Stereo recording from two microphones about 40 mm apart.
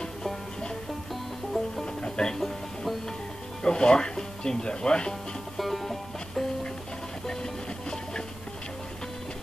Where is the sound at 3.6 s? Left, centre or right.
Left.